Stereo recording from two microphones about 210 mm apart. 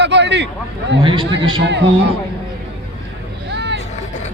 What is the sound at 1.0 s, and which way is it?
Speech, 25° right (ahead or behind).